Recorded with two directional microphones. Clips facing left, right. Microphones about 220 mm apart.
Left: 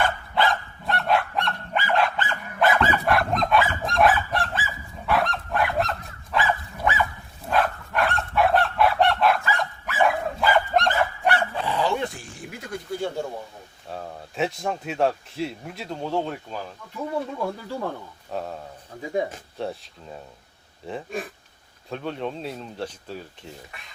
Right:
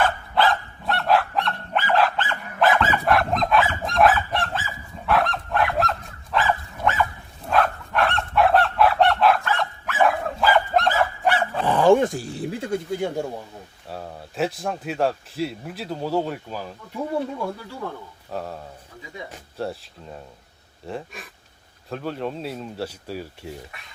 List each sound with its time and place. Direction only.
0.0 s goose: centre (ahead or behind)
6.3 s dog: centre (ahead or behind)
7.5 s goose: centre (ahead or behind)
10.4 s dog: centre (ahead or behind)
11.6 s a sound: 50° right (ahead or behind); by 13.2 s 20° right (ahead or behind)
13.9 s speech: centre (ahead or behind)
18.3 s speech: centre (ahead or behind)
19.6 s speech: centre (ahead or behind)
21.8 s speech: centre (ahead or behind)